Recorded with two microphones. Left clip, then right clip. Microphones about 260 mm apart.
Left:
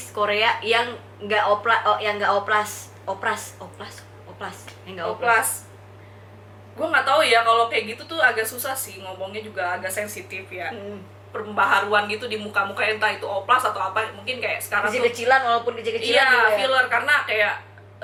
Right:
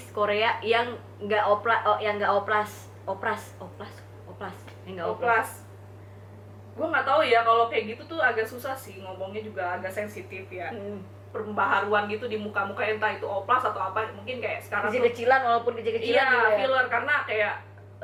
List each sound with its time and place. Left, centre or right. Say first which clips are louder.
0.2 s a woman's voice: left 4 dB; centre
4.4 s a sound: left 4 dB; centre
6.7 s a woman's voice: left 4 dB; centre